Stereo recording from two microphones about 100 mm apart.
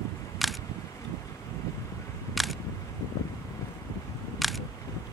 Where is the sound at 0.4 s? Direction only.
Centre (ahead or behind).